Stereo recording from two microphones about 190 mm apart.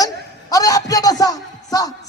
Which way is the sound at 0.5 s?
20° left (ahead or behind).